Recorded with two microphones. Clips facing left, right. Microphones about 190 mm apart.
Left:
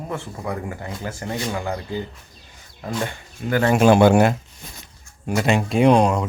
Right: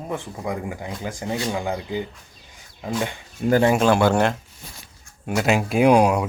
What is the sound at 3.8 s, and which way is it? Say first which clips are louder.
Speech: left 4 dB; 20° left (ahead or behind).